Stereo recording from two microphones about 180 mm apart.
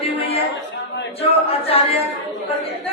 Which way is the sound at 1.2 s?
30° left (ahead or behind).